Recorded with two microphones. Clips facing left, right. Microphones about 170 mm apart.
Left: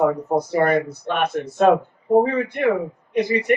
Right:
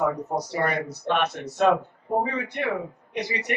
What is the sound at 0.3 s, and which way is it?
Speech, 55° left (ahead or behind).